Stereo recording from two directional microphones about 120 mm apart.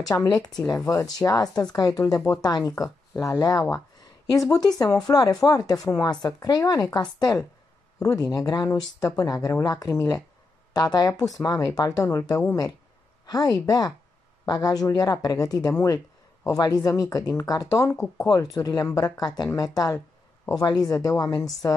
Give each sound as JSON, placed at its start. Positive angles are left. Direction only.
{"t": 0.1, "sound": "speech", "side_deg": 30}